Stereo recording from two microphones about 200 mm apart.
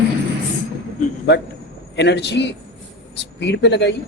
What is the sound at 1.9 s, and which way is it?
Speech, 60° left (ahead or behind).